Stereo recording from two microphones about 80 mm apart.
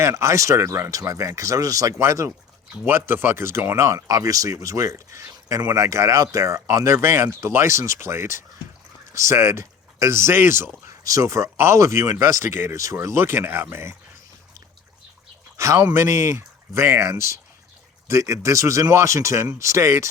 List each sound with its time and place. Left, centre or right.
0.0 s speech: right
15.5 s speech: right